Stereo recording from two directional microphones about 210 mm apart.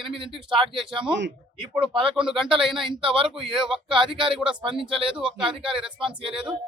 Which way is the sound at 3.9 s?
25° right (ahead or behind).